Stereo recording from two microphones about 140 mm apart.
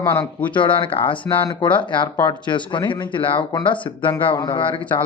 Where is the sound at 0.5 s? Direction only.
35° left (ahead or behind).